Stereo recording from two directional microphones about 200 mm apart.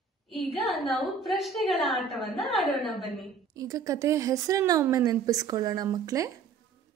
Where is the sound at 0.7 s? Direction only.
Centre (ahead or behind).